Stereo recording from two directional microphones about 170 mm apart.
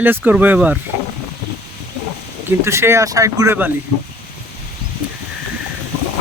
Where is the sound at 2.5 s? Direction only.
15° right (ahead or behind).